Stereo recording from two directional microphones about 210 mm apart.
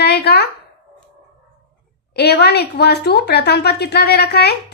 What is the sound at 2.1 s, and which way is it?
A woman's voice, 50° left (ahead or behind).